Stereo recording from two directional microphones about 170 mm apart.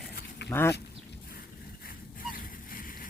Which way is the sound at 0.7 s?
65° left (ahead or behind).